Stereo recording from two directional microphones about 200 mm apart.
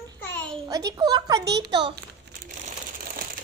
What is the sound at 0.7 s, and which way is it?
A child's voice, 20° right (ahead or behind).